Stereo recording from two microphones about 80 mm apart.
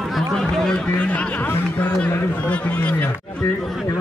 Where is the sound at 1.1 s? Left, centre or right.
Centre.